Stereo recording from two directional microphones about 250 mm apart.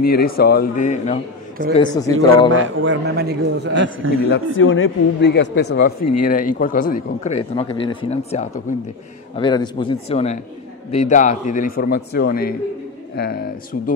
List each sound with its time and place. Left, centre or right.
0.0 s a man's voice: left
1.7 s speech: centre
2.1 s a man's voice: right
4.3 s a man's voice: left